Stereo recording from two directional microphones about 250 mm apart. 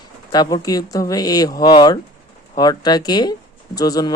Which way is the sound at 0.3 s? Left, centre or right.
Centre.